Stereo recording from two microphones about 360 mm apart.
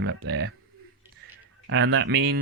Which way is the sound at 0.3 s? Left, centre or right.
Right.